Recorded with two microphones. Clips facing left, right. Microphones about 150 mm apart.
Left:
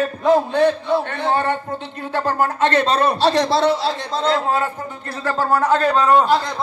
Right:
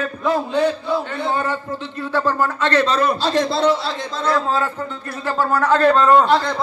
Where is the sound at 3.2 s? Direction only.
75° left (ahead or behind).